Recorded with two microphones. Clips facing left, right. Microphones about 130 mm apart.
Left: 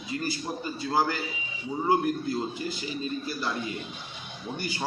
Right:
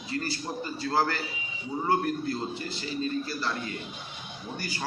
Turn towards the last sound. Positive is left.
turn(degrees=20)  # may be behind; listen again after turning